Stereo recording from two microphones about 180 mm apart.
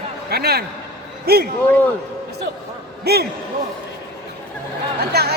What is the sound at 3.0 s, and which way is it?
Speech, 60° right (ahead or behind).